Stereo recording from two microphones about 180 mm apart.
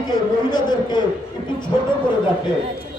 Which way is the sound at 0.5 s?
25° left (ahead or behind).